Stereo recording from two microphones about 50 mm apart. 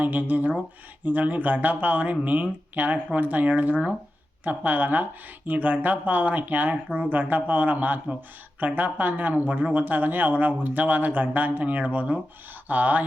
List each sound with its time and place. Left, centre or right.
0.0 s speech: right